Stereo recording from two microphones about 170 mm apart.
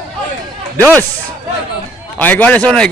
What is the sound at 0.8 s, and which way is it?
Speech, 10° left (ahead or behind).